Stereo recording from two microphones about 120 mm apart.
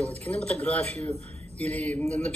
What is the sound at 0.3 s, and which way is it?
Speech, 10° left (ahead or behind).